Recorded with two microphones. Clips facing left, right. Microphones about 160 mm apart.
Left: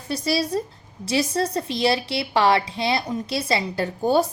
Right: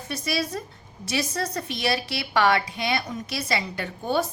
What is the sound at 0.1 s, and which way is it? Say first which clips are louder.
A woman's voice: left 5 dB; 30° left (ahead or behind).